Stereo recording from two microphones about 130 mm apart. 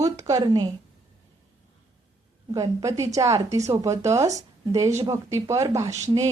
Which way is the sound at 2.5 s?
25° right (ahead or behind).